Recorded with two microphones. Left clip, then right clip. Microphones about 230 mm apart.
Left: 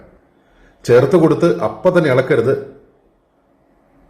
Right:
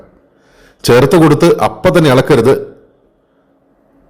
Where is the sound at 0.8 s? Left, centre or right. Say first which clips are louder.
Right 4 dB; right.